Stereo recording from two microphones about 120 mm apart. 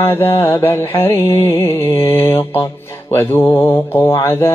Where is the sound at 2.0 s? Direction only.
20° left (ahead or behind).